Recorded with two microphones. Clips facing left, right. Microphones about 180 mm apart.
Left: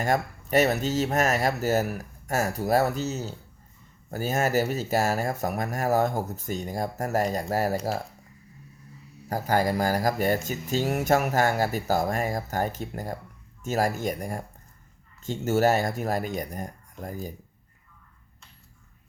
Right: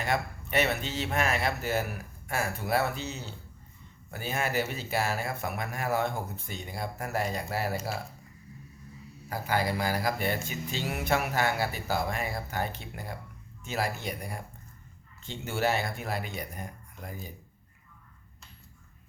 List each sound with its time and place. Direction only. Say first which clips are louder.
0.0 s speech: left 5 dB; 40° left (ahead or behind)
9.3 s speech: left 5 dB; 45° left (ahead or behind)